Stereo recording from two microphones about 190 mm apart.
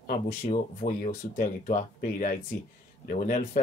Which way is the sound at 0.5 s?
40° left (ahead or behind).